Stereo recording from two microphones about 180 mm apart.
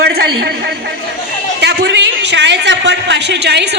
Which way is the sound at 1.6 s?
70° right (ahead or behind).